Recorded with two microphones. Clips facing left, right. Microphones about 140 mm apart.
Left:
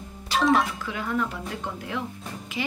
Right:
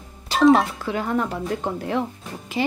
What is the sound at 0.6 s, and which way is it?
A woman's voice, 40° right (ahead or behind).